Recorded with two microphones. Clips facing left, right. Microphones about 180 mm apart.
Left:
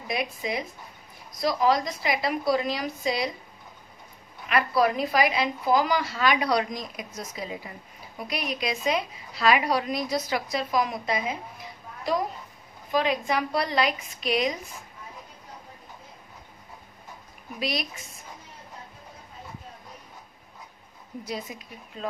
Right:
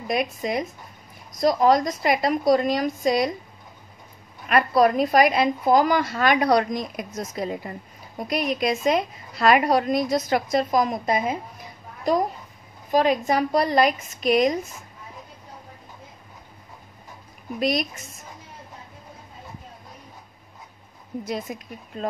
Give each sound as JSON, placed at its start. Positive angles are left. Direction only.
{"t": 0.1, "sound": "a woman's voice", "side_deg": -50}
{"t": 4.5, "sound": "a woman's voice", "side_deg": -50}
{"t": 12.9, "sound": "a woman's voice", "side_deg": -45}
{"t": 17.6, "sound": "a woman's voice", "side_deg": -50}
{"t": 21.3, "sound": "a woman's voice", "side_deg": -50}